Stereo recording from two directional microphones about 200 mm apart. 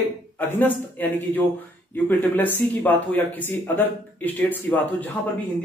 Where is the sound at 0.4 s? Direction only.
10° left (ahead or behind).